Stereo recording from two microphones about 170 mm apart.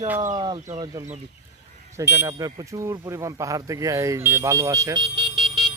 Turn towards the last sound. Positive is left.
turn(degrees=-30)  # may be behind; listen again after turning